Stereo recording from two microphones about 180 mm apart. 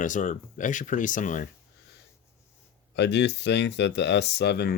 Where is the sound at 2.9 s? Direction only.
75° left (ahead or behind).